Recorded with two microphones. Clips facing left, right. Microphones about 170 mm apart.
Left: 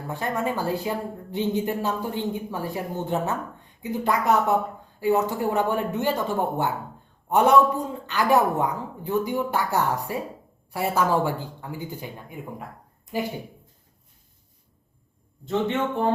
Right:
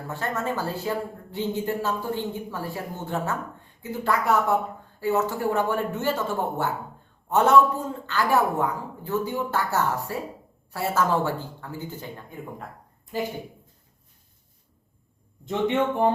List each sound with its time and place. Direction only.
0.1 s speech: 15° left (ahead or behind)
15.4 s speech: 15° right (ahead or behind)